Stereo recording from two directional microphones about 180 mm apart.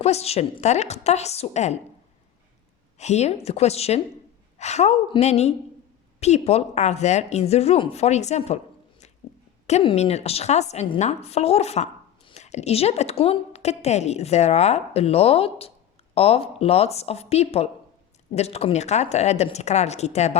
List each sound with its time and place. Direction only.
0.0 s a woman's voice: 35° left (ahead or behind)
3.0 s a woman's voice: 40° left (ahead or behind)
9.6 s a woman's voice: 35° left (ahead or behind)